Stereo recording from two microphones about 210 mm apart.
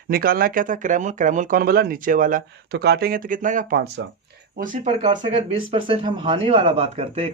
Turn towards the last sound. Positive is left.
turn(degrees=-30)  # may be behind; listen again after turning